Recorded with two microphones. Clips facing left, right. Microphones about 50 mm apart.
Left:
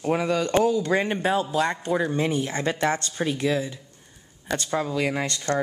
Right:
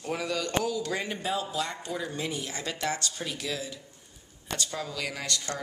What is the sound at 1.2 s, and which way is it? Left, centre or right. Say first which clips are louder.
Speech: left 8 dB; left.